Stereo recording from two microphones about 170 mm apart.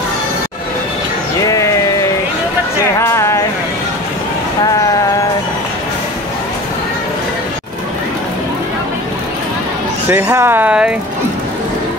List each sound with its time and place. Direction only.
1.4 s a sound: 20° left (ahead or behind)
3.0 s music: 15° left (ahead or behind)
10.0 s speech: 10° right (ahead or behind)